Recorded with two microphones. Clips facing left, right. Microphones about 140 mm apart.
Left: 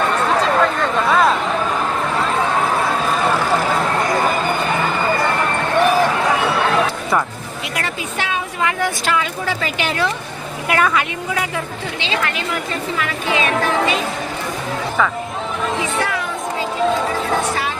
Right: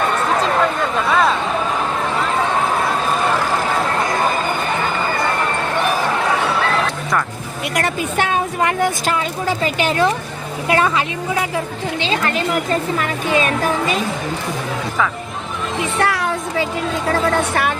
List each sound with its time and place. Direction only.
0.6 s a sound: 5° right (ahead or behind)
7.8 s speech: 45° right (ahead or behind)
10.7 s a woman's voice: 30° right (ahead or behind)
11.9 s speech: 45° right (ahead or behind)
16.0 s a sound: 75° right (ahead or behind)
17.1 s a woman's voice: 55° right (ahead or behind)